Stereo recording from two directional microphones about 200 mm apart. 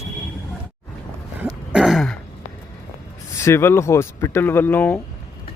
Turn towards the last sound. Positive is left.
turn(degrees=10)  # may be behind; listen again after turning